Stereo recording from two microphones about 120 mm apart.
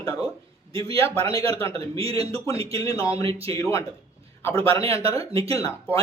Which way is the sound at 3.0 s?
30° left (ahead or behind).